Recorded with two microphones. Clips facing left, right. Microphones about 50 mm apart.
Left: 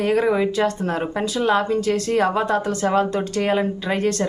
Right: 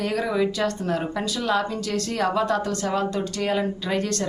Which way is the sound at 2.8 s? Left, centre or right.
Left.